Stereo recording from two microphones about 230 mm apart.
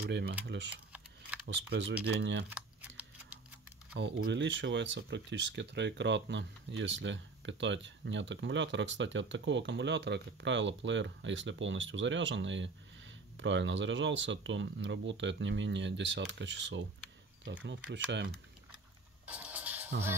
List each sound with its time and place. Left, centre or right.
0.0 s speech: right
1.5 s speech: right
2.5 s a sound: centre
3.9 s speech: right
19.2 s music: centre